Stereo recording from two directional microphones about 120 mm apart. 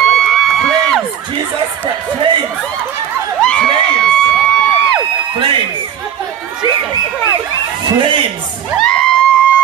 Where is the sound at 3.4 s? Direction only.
10° left (ahead or behind).